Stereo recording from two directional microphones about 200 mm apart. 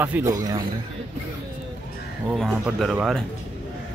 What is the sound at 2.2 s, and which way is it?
Speech, centre (ahead or behind).